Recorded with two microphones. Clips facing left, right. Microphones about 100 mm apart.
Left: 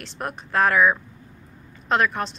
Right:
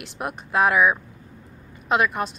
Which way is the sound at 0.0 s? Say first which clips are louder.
Right 1 dB; 10° right (ahead or behind).